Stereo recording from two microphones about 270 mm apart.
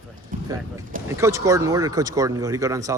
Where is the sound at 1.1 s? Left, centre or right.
Centre.